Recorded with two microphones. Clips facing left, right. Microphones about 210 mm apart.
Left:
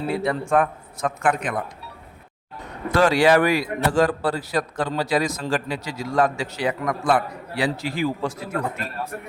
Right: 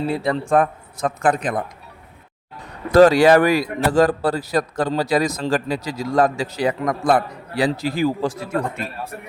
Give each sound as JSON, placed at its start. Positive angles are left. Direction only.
{"t": 0.1, "sound": "a man's voice", "side_deg": -35}
{"t": 2.9, "sound": "a man's voice", "side_deg": -40}